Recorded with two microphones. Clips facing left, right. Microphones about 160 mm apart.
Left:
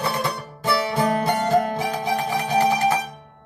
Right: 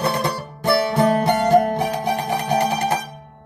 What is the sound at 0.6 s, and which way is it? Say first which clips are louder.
Music: right 4 dB; 65° right (ahead or behind).